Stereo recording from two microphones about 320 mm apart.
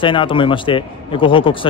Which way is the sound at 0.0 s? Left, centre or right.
Centre.